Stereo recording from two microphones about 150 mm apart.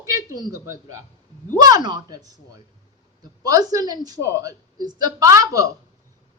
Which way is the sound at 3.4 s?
25° right (ahead or behind).